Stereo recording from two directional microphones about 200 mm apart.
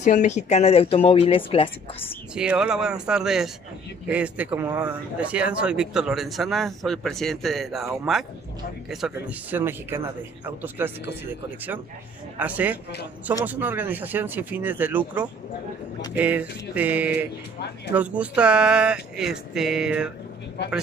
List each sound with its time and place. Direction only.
0.0 s speech: 35° left (ahead or behind)
2.3 s speech: 5° right (ahead or behind)
12.4 s speech: 5° right (ahead or behind)